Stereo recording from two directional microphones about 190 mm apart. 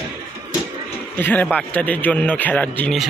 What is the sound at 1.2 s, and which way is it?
A man's voice, 10° left (ahead or behind).